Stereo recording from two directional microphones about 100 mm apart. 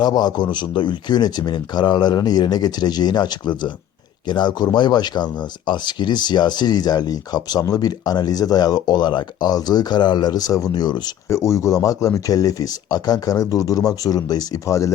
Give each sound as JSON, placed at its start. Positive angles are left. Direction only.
{"t": 0.0, "sound": "speech", "side_deg": 45}
{"t": 11.3, "sound": "speech", "side_deg": 30}